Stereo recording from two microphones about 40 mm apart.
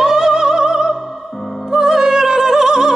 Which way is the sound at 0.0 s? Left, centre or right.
Centre.